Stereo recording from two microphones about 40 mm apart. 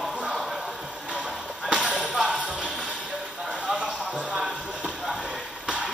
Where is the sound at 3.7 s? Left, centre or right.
Right.